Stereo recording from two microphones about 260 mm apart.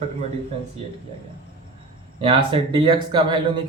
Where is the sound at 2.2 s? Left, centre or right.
Right.